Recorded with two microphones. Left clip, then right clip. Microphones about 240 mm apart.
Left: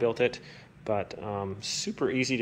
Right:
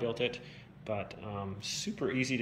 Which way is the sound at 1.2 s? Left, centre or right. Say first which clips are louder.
Left 8 dB; left.